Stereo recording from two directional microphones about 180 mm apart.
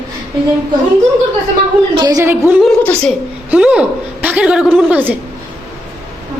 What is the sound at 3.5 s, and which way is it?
A woman's voice, 5° right (ahead or behind).